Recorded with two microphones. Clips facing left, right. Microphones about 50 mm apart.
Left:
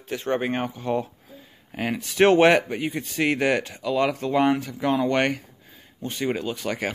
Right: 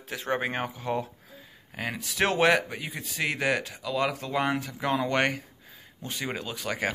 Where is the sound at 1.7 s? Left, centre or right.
Centre.